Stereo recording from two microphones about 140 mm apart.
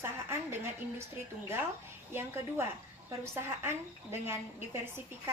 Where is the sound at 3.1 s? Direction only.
15° right (ahead or behind).